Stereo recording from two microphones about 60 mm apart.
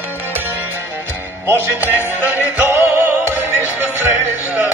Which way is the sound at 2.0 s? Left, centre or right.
Right.